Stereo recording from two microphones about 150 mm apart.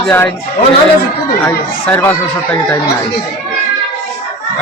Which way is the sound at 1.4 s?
15° left (ahead or behind).